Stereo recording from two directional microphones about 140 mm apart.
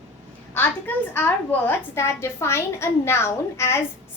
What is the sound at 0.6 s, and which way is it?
A woman's voice, 15° left (ahead or behind).